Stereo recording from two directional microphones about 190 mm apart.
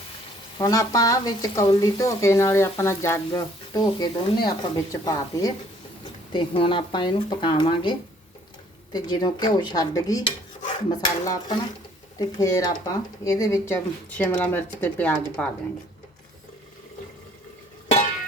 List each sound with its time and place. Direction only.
0.6 s speech: 20° left (ahead or behind)